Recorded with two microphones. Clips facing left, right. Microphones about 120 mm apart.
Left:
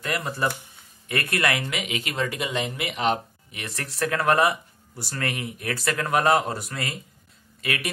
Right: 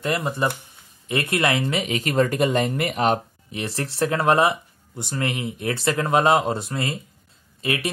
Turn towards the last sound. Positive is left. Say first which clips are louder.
# right 4 dB
turn(degrees=-30)  # may be behind; listen again after turning